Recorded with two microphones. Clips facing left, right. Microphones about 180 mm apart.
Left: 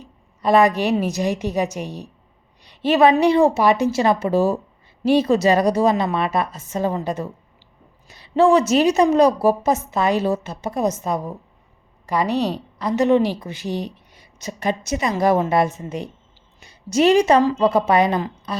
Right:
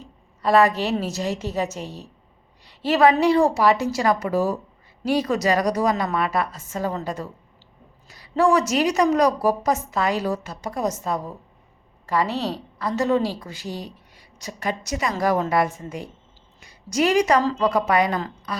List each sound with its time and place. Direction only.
0.4 s a woman's voice: 15° left (ahead or behind)